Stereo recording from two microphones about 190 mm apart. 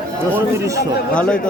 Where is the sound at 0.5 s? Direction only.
15° right (ahead or behind).